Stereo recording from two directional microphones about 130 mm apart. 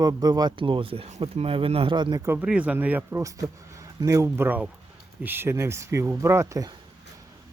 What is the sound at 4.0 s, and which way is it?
Speech, 25° right (ahead or behind).